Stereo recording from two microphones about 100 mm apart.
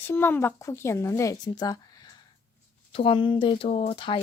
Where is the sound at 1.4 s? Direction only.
45° left (ahead or behind).